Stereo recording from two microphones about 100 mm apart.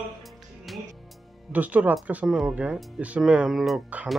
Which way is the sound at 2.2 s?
Centre (ahead or behind).